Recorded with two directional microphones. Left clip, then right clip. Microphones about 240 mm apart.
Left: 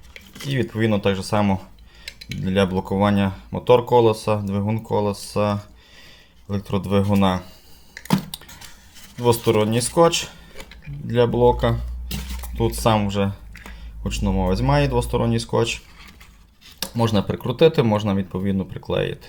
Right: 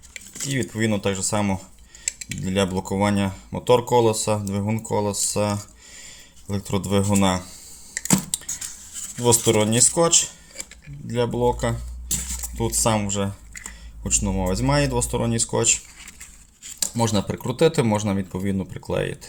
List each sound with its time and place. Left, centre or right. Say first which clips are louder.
0.4 s speech: left 2 dB; centre
2.0 s cutlery: right 3 dB; centre
2.4 s speech: left 3 dB; centre
8.3 s a sound: right 5 dB; centre
9.1 s speech: left 1 dB; centre
16.8 s speech: left 1 dB; centre